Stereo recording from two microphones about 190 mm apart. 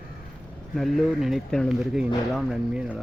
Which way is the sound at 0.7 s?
Centre (ahead or behind).